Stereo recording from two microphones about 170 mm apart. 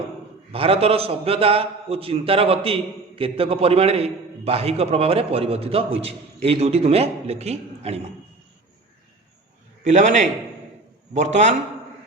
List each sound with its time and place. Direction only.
0.5 s a man's voice: 35° right (ahead or behind)
9.8 s a man's voice: 45° right (ahead or behind)